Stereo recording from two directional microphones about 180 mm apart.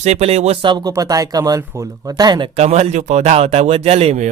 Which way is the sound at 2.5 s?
40° right (ahead or behind).